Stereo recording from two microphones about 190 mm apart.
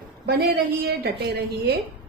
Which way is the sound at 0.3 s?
55° right (ahead or behind).